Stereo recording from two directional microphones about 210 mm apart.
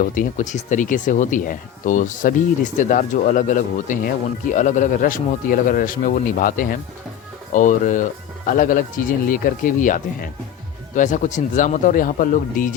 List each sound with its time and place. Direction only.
0.0 s speech: 40° left (ahead or behind)